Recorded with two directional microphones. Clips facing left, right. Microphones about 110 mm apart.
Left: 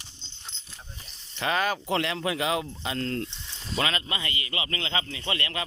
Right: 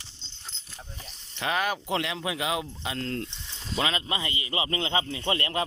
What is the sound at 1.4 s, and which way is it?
Speech, 5° right (ahead or behind).